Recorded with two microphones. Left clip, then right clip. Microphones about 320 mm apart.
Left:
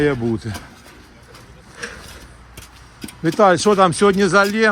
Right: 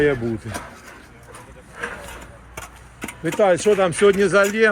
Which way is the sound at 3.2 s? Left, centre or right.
Centre.